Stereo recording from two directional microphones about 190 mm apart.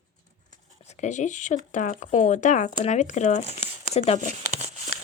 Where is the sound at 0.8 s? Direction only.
35° left (ahead or behind).